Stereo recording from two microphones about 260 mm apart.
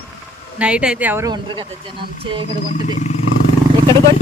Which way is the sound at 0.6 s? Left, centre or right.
Centre.